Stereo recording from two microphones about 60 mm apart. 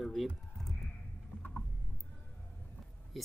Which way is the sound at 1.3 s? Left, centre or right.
Left.